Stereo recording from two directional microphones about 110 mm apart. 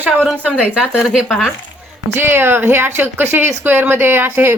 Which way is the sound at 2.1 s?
20° right (ahead or behind).